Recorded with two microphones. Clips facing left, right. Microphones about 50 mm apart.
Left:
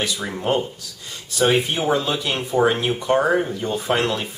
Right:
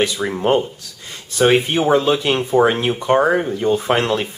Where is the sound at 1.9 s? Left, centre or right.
Right.